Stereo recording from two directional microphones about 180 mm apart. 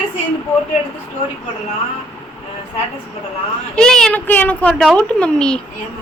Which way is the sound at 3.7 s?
5° left (ahead or behind).